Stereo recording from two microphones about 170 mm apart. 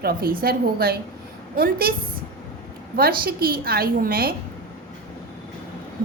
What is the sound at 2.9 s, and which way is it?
A woman's voice, 60° right (ahead or behind).